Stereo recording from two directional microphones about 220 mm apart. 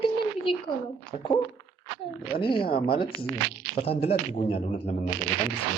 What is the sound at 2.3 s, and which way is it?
A man's voice, 25° left (ahead or behind).